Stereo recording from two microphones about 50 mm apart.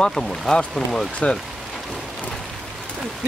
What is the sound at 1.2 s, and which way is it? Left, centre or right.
Speech, left.